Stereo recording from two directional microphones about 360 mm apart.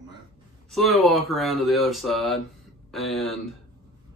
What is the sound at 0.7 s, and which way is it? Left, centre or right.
Speech, centre.